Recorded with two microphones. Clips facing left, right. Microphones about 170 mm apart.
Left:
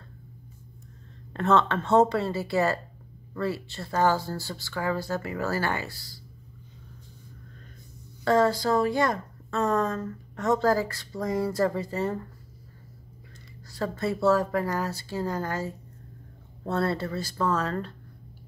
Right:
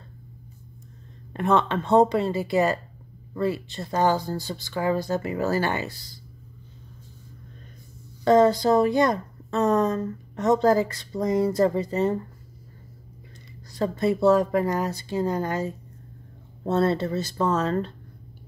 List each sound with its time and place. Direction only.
1.3 s a woman's voice: 15° right (ahead or behind)
8.2 s a woman's voice: 20° right (ahead or behind)
13.7 s a woman's voice: 20° right (ahead or behind)